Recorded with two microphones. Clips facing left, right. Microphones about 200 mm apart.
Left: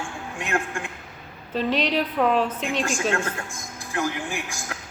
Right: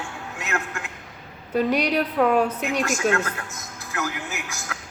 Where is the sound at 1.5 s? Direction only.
10° right (ahead or behind).